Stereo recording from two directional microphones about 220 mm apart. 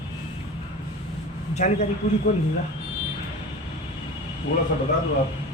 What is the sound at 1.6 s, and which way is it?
Speech, 35° left (ahead or behind).